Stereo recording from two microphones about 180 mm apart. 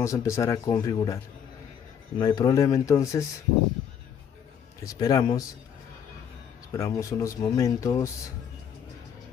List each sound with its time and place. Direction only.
0.0 s speech: 15° left (ahead or behind)
4.8 s speech: 20° left (ahead or behind)
6.7 s speech: 20° left (ahead or behind)